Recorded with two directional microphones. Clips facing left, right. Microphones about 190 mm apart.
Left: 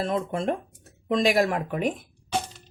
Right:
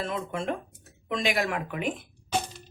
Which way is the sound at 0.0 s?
40° left (ahead or behind).